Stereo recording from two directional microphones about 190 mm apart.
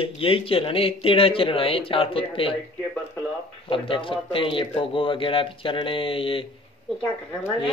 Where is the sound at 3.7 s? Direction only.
25° left (ahead or behind).